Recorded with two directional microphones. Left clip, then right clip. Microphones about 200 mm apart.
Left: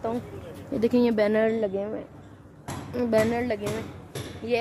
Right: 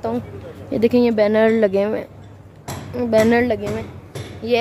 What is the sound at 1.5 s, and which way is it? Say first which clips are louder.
Speech: right 11 dB; 20° right (ahead or behind).